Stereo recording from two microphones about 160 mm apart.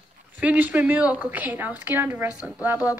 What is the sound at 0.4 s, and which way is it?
A woman's voice, 10° right (ahead or behind).